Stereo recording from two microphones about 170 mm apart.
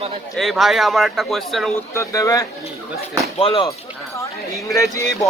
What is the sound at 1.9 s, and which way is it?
Speech, 20° left (ahead or behind).